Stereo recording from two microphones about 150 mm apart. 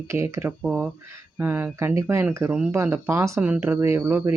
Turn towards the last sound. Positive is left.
turn(degrees=-15)  # may be behind; listen again after turning